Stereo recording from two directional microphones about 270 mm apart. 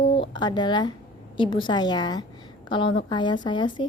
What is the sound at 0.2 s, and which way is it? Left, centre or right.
A woman's voice, centre.